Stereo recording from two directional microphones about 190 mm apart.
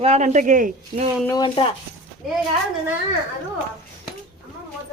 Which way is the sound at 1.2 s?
20° left (ahead or behind).